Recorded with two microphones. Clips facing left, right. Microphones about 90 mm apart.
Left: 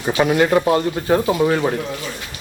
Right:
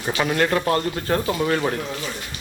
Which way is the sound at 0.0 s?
15° left (ahead or behind).